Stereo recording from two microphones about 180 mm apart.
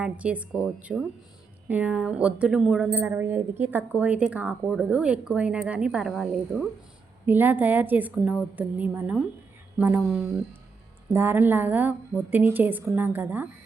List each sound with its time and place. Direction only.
0.0 s a woman's voice: 5° right (ahead or behind)